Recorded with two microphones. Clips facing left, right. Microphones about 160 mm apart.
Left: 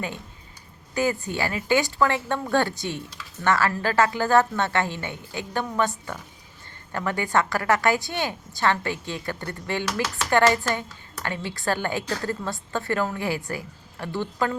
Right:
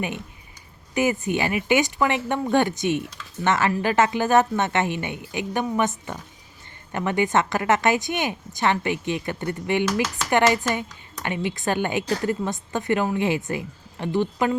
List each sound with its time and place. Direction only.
0.9 s a woman's voice: 20° right (ahead or behind)